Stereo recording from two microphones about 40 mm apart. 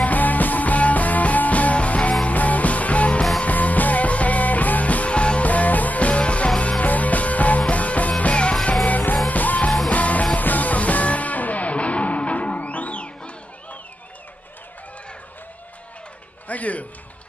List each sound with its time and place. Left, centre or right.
0.0 s music: left
8.8 s music: left
16.4 s music: left